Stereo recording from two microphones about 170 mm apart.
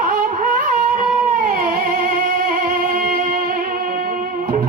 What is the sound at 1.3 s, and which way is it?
Music, 55° right (ahead or behind).